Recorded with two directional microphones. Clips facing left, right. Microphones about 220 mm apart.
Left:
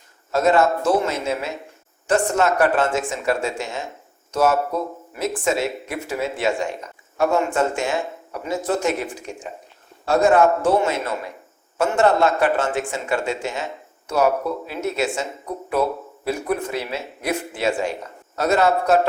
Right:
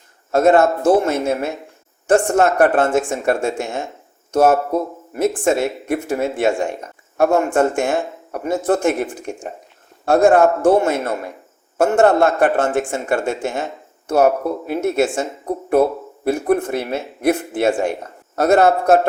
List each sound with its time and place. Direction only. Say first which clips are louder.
0.3 s speech: right 4 dB; 55° right (ahead or behind)
14.7 s speech: right 8 dB; 50° right (ahead or behind)